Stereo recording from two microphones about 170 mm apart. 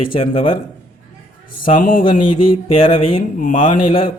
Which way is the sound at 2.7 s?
30° left (ahead or behind).